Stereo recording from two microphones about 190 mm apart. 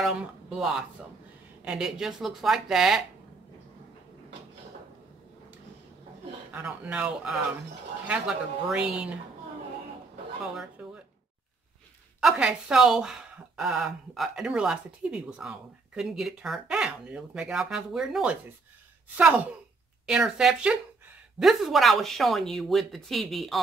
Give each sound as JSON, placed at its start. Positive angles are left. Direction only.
{"t": 0.0, "sound": "speech", "side_deg": -5}
{"t": 6.5, "sound": "speech", "side_deg": -5}
{"t": 10.4, "sound": "speech", "side_deg": 0}
{"t": 12.2, "sound": "speech", "side_deg": -5}